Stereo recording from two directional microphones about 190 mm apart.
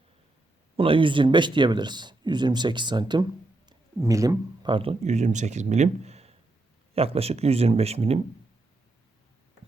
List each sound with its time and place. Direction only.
0.8 s speech: 25° right (ahead or behind)